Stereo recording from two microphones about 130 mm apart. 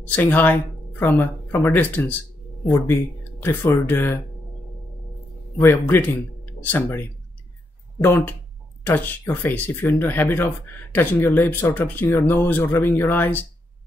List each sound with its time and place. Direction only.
0.1 s speech: 15° left (ahead or behind)
5.6 s speech: 15° left (ahead or behind)